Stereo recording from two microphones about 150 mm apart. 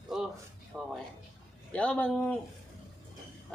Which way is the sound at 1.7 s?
10° left (ahead or behind).